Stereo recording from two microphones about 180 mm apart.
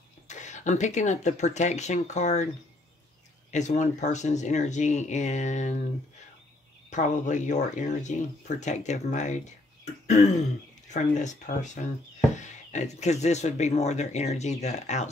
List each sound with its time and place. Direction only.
0.3 s speech: 40° left (ahead or behind)
3.5 s speech: 40° left (ahead or behind)
6.9 s speech: 40° left (ahead or behind)